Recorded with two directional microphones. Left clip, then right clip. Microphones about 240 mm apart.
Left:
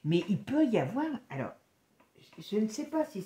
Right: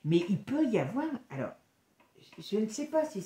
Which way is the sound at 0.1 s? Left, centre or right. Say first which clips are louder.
Right 1 dB; left.